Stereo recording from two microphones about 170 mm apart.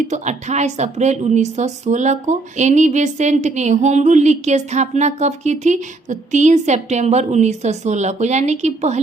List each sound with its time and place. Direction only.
0.1 s a woman's voice: 45° right (ahead or behind)